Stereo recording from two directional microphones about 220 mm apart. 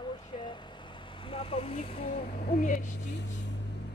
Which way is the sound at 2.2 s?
35° left (ahead or behind).